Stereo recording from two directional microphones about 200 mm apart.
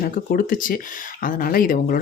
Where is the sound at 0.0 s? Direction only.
45° left (ahead or behind).